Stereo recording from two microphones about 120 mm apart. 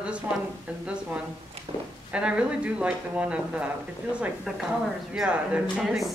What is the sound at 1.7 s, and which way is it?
Speech, 50° right (ahead or behind).